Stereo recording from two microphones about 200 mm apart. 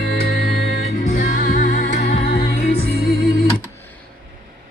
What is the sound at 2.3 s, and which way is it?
Music, 50° left (ahead or behind).